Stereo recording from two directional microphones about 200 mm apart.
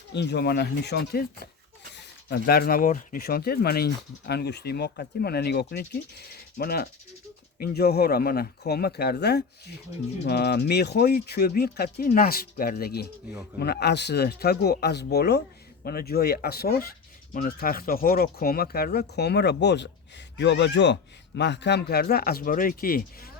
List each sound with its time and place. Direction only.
0.1 s speech: 60° left (ahead or behind)